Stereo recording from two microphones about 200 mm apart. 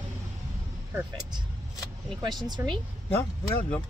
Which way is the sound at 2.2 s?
20° right (ahead or behind).